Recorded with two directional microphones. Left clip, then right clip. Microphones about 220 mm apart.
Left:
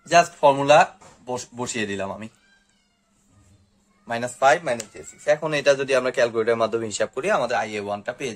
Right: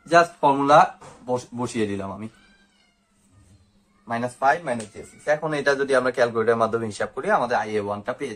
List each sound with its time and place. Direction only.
0.0 s speech: 50° left (ahead or behind)
4.1 s a man's voice: 50° left (ahead or behind)